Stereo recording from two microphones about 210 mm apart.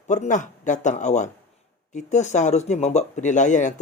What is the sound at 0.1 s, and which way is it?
Speech, 35° left (ahead or behind).